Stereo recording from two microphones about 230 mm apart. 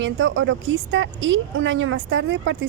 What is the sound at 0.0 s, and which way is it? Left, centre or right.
Speech, right.